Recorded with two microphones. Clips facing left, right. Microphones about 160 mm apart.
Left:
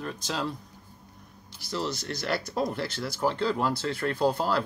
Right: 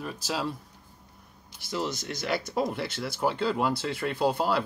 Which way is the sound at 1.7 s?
20° right (ahead or behind).